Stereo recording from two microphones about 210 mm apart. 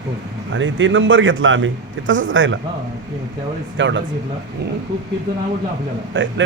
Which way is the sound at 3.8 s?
60° right (ahead or behind).